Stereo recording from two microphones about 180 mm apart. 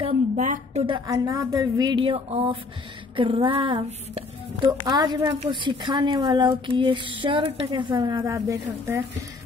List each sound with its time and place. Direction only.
0.0 s a sound: 40° right (ahead or behind)
0.8 s a woman's voice: 25° right (ahead or behind)
4.6 s a woman's voice: 20° right (ahead or behind)